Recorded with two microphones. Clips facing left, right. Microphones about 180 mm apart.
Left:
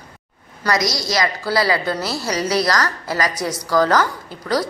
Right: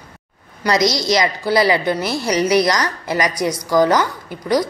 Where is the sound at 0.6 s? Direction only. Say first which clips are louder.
Right 4 dB; 20° right (ahead or behind).